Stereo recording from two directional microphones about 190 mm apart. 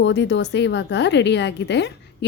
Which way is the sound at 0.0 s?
65° left (ahead or behind).